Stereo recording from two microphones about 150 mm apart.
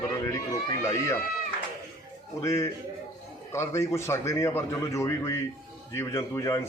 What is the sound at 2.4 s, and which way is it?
A man's voice, 20° left (ahead or behind).